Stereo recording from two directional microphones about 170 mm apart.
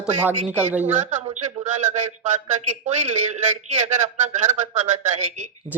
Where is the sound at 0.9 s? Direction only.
45° right (ahead or behind).